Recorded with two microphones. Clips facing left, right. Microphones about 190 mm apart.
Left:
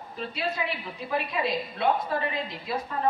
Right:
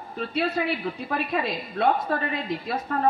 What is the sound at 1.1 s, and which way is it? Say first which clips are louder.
A woman's voice: left 1 dB; 45° right (ahead or behind).